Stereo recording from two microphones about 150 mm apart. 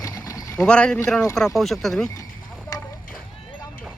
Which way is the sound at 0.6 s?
5° left (ahead or behind).